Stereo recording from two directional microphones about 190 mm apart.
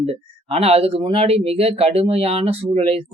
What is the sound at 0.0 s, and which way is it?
Speech, 30° right (ahead or behind).